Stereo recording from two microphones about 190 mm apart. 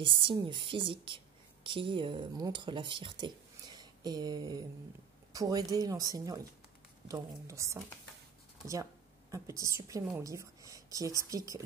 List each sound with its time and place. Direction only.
0.0 s a woman's voice: 25° right (ahead or behind)
9.3 s speech: 15° right (ahead or behind)